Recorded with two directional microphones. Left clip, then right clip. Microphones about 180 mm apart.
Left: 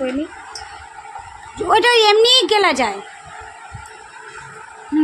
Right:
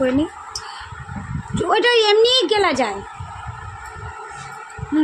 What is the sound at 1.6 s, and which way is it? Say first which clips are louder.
A woman's voice: left 3 dB; 5° left (ahead or behind).